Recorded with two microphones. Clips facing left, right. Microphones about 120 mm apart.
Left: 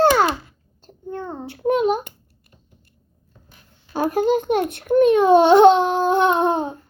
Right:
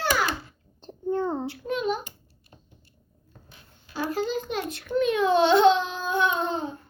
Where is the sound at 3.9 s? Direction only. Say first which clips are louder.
Left 9 dB; 50° left (ahead or behind).